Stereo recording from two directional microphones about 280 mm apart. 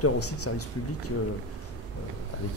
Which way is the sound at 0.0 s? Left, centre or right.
Left.